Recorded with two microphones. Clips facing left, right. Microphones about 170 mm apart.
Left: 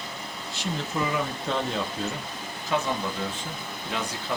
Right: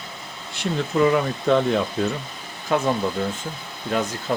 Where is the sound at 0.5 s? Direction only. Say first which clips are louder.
Right 7 dB; 60° right (ahead or behind).